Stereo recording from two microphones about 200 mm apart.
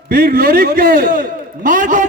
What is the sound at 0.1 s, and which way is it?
A man's voice, 45° right (ahead or behind).